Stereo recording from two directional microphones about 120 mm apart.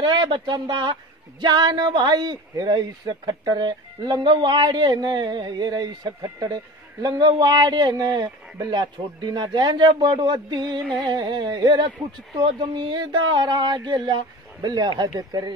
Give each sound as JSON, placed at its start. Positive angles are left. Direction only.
{"t": 0.0, "sound": "a man's voice", "side_deg": -40}
{"t": 10.8, "sound": "carnatic music", "side_deg": 5}
{"t": 11.1, "sound": "a man's voice", "side_deg": -40}